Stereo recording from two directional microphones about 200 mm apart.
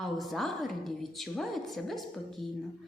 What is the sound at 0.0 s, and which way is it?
A woman's voice, centre (ahead or behind).